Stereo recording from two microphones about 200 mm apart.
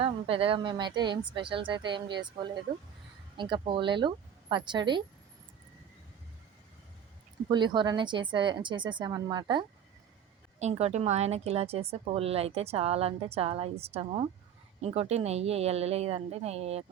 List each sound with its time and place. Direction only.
0.0 s a woman's voice: 25° right (ahead or behind)
7.5 s a woman's voice: 20° right (ahead or behind)
10.6 s a woman's voice: 35° right (ahead or behind)